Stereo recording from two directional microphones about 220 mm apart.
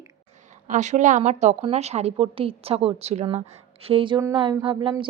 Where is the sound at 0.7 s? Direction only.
35° right (ahead or behind).